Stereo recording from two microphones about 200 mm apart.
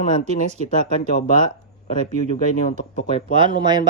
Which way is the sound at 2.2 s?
40° left (ahead or behind).